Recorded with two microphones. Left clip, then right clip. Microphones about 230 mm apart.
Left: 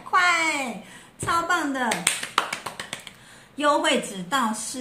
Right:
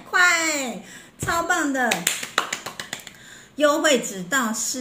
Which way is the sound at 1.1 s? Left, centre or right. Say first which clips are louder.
Right 1 dB; centre.